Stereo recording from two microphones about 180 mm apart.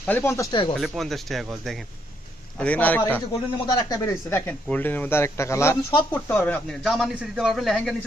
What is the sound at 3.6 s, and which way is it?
Speech, 20° left (ahead or behind).